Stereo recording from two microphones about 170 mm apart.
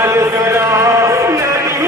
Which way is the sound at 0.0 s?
15° right (ahead or behind).